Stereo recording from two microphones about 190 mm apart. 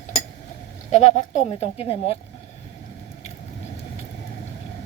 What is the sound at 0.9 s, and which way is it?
Speech, 40° left (ahead or behind).